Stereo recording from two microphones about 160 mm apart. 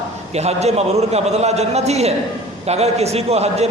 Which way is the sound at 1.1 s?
45° right (ahead or behind).